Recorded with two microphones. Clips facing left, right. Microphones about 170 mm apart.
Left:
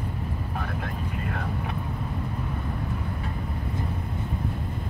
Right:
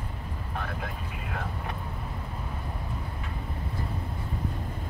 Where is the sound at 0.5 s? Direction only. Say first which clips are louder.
Left 1 dB; centre (ahead or behind).